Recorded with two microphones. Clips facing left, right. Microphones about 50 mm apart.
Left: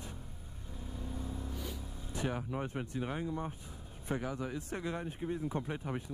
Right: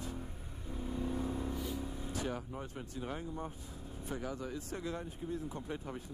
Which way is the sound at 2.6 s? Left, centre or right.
Left.